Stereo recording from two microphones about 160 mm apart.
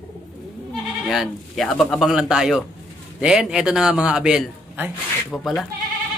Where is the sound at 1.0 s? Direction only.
Centre (ahead or behind).